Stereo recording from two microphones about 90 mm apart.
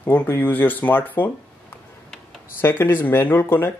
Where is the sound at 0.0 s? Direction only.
25° left (ahead or behind).